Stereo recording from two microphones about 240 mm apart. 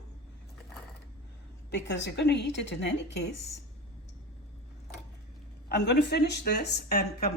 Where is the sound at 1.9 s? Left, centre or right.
Left.